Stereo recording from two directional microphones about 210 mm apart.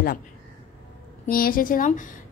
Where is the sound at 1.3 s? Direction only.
45° left (ahead or behind).